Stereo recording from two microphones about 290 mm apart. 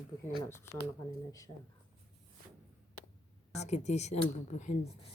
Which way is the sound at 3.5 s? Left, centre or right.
Left.